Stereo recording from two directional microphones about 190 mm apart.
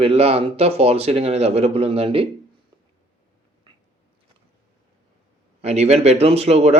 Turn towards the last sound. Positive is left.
turn(degrees=-35)  # may be behind; listen again after turning